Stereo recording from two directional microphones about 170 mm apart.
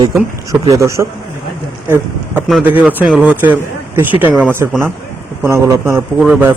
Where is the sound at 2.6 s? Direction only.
10° right (ahead or behind).